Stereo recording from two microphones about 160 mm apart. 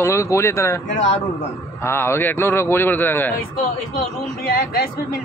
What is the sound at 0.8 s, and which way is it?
Speech, 50° left (ahead or behind).